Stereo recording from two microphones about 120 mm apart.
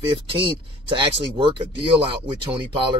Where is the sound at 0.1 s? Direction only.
45° right (ahead or behind).